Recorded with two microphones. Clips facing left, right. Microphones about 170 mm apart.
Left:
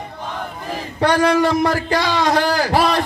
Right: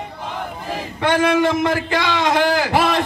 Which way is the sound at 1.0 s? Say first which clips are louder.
Left 1 dB; 20° right (ahead or behind).